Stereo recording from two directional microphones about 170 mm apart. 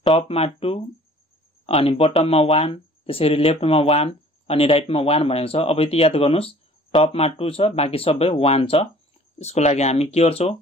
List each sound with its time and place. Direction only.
0.0 s speech: 30° left (ahead or behind)